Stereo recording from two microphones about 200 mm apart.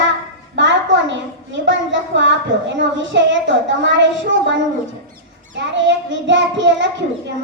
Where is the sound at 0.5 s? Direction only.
65° right (ahead or behind).